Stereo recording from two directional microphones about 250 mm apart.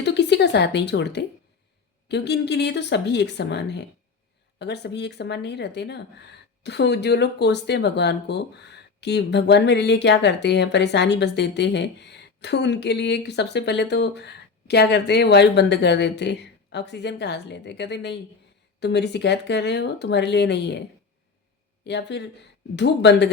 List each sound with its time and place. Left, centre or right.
0.0 s a sound: left
2.0 s speech: left
21.8 s speech: left